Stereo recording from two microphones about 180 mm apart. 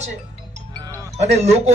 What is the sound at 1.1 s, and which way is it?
Speech, 35° right (ahead or behind).